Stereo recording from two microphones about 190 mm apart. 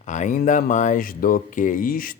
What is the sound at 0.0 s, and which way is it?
Speech, 40° left (ahead or behind).